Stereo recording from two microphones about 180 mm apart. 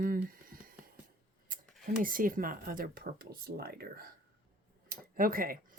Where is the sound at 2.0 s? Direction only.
50° right (ahead or behind).